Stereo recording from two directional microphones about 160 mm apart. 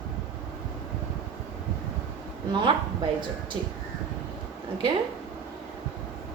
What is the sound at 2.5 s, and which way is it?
Speech, 30° right (ahead or behind).